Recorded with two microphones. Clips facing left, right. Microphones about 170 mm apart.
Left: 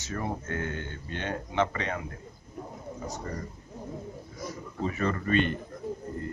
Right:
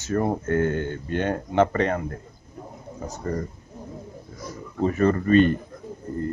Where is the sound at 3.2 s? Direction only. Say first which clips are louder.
Right 12 dB; 45° right (ahead or behind).